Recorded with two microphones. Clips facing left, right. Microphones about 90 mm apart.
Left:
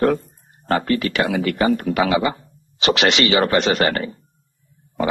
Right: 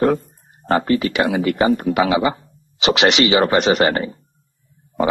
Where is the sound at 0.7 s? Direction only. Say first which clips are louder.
Right 2 dB; 20° right (ahead or behind).